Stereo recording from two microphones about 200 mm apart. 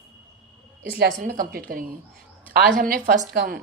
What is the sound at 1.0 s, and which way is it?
A woman's voice, 40° right (ahead or behind).